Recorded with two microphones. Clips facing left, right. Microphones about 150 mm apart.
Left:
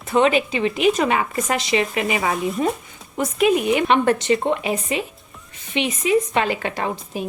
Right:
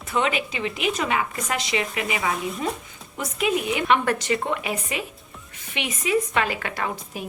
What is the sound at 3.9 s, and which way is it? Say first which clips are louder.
A woman's voice: left 2 dB; 25° left (ahead or behind).